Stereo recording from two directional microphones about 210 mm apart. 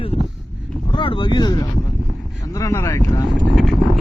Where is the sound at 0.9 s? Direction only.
25° left (ahead or behind).